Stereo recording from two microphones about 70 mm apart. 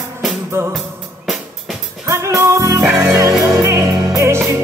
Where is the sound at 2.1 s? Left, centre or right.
Right.